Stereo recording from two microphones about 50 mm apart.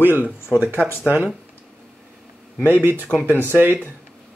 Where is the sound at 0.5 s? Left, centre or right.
Right.